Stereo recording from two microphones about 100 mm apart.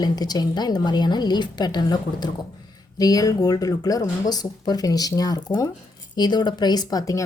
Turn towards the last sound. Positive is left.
turn(degrees=35)  # may be behind; listen again after turning